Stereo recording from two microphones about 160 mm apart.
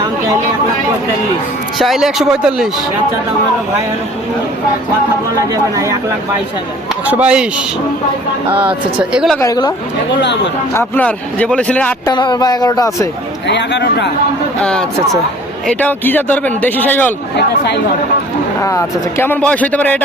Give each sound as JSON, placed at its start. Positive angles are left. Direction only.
{"t": 1.8, "sound": "a man's voice", "side_deg": 0}
{"t": 5.7, "sound": "speech", "side_deg": -20}
{"t": 7.1, "sound": "speech", "side_deg": -10}
{"t": 8.5, "sound": "speech", "side_deg": -10}
{"t": 9.4, "sound": "speech", "side_deg": 25}
{"t": 10.1, "sound": "speech", "side_deg": 90}
{"t": 10.8, "sound": "a man's voice", "side_deg": 10}
{"t": 12.0, "sound": "speech", "side_deg": 25}
{"t": 13.5, "sound": "speech", "side_deg": 90}
{"t": 14.6, "sound": "a man's voice", "side_deg": 5}
{"t": 18.6, "sound": "a man's voice", "side_deg": 20}